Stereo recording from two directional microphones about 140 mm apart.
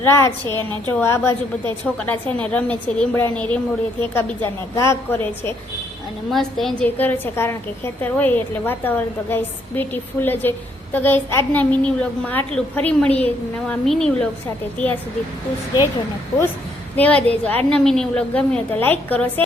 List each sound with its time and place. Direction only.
0.0 s a woman's voice: 20° left (ahead or behind)
6.3 s a woman's voice: centre (ahead or behind)
6.8 s a woman's voice: 10° left (ahead or behind)
17.0 s a woman's voice: 10° left (ahead or behind)